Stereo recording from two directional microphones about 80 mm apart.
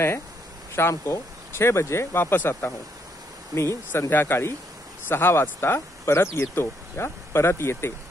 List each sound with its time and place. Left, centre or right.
0.7 s speech: left